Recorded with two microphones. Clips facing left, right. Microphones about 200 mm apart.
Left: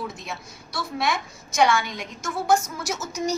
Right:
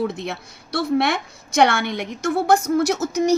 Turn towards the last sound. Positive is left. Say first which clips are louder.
# right 9 dB
turn(degrees=-60)  # may be behind; listen again after turning